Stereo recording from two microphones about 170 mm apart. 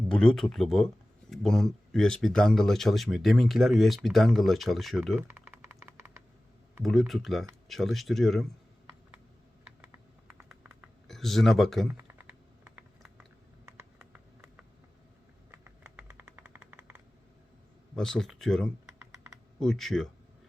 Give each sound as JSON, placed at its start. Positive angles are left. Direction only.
{"t": 0.1, "sound": "speech", "side_deg": 5}
{"t": 5.1, "sound": "typing", "side_deg": -15}
{"t": 7.1, "sound": "speech", "side_deg": 0}
{"t": 10.3, "sound": "typing", "side_deg": -5}
{"t": 11.9, "sound": "typing", "side_deg": -10}
{"t": 14.0, "sound": "a sound", "side_deg": -5}
{"t": 17.9, "sound": "speech", "side_deg": 5}